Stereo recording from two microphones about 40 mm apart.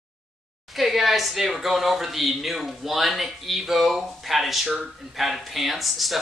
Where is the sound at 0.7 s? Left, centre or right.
Centre.